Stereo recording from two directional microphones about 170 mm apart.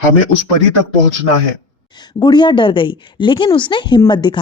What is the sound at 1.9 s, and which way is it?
Speech, 25° left (ahead or behind).